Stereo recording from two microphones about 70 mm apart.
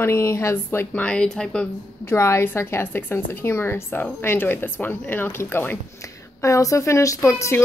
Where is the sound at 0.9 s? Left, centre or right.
Centre.